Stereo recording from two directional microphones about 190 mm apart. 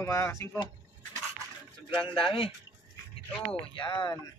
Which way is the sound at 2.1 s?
25° left (ahead or behind).